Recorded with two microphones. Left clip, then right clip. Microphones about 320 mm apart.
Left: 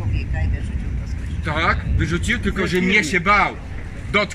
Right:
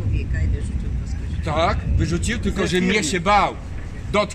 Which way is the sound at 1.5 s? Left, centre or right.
Centre.